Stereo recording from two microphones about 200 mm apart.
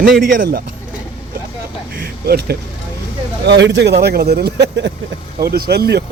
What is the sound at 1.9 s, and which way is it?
Speech, 50° right (ahead or behind).